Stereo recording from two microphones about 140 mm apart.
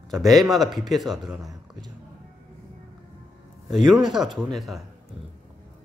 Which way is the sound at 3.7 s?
Centre (ahead or behind).